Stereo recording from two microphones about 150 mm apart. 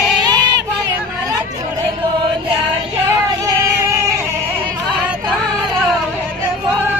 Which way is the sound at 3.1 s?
20° right (ahead or behind).